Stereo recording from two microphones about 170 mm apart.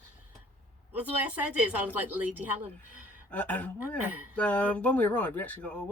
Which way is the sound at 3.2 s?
10° left (ahead or behind).